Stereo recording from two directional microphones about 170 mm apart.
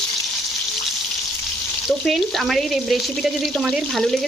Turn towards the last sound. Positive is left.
turn(degrees=0)  # may be behind; listen again after turning